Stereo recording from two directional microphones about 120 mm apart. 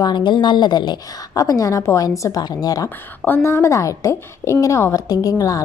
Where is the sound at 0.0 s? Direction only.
40° left (ahead or behind).